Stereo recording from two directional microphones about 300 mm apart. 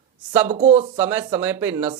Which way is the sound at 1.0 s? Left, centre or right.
Centre.